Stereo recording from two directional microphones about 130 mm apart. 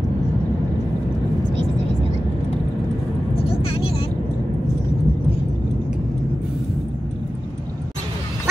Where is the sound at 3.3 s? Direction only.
50° left (ahead or behind).